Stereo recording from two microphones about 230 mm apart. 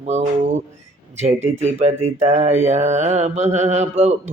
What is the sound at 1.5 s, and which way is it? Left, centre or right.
Mantra, right.